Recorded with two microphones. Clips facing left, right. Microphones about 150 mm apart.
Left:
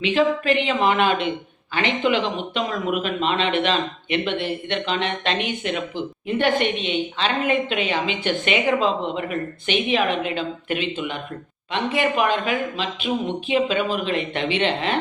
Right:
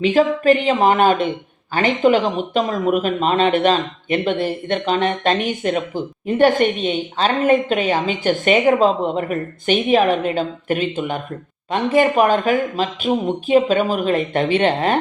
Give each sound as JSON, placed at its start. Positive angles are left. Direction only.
{"t": 0.0, "sound": "speech", "side_deg": -45}